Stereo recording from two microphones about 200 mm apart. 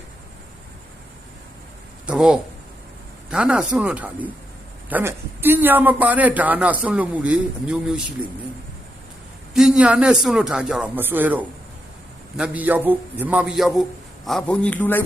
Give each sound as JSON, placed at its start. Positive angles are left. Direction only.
{"t": 2.0, "sound": "a man's voice", "side_deg": -5}
{"t": 9.6, "sound": "a man's voice", "side_deg": -5}